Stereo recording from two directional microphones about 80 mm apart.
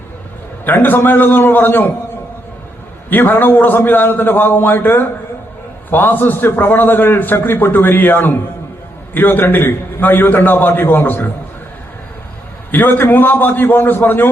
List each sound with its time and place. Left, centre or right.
0.6 s a man's voice: left
3.1 s a man's voice: left
12.7 s a man's voice: left